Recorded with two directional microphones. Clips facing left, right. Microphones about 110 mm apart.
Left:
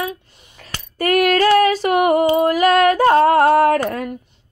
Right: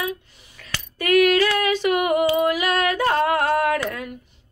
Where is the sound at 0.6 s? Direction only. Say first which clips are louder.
Left 6 dB; 40° left (ahead or behind).